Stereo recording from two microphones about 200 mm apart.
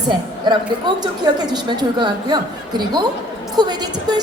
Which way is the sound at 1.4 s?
20° right (ahead or behind).